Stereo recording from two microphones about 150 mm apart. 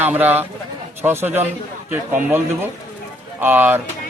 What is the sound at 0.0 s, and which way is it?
Speech, 10° right (ahead or behind).